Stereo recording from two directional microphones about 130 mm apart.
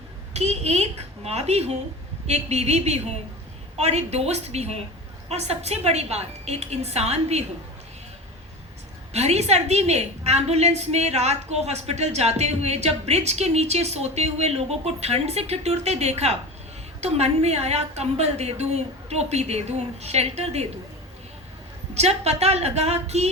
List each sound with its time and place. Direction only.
0.3 s a woman's voice: 55° right (ahead or behind)
9.1 s a woman's voice: 55° right (ahead or behind)
21.9 s a woman's voice: 55° right (ahead or behind)